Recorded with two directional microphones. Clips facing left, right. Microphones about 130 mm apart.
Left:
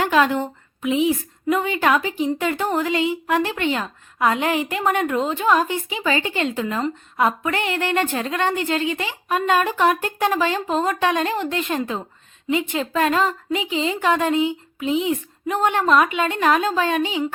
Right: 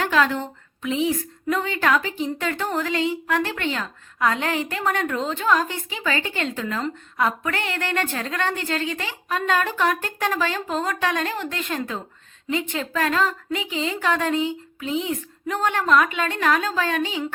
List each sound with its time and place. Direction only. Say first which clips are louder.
0.0 s a woman's voice: left 3 dB; 15° left (ahead or behind)